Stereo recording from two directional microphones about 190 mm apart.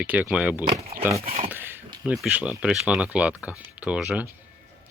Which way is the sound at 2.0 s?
5° right (ahead or behind).